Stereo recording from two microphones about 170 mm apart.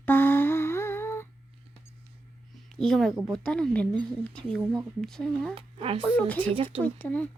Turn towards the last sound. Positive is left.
turn(degrees=10)  # may be behind; listen again after turning